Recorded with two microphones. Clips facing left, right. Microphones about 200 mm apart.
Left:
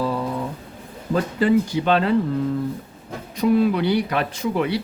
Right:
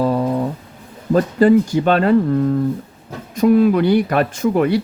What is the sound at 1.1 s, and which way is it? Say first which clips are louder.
Speech: right 6 dB; 45° right (ahead or behind).